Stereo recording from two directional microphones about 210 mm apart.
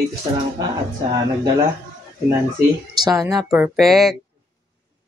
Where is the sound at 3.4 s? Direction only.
Centre (ahead or behind).